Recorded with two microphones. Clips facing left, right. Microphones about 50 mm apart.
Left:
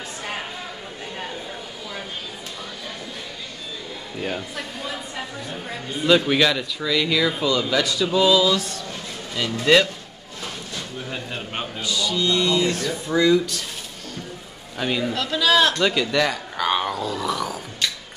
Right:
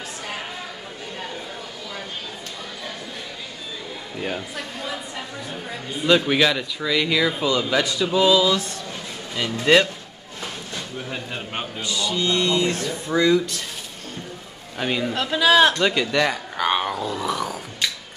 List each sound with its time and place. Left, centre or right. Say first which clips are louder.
6.0 s speech: even; centre
11.1 s a sound: even; centre
11.8 s speech: left 1 dB; right
13.1 s speech: even; centre
14.8 s speech: even; centre
15.7 s a sound: even; centre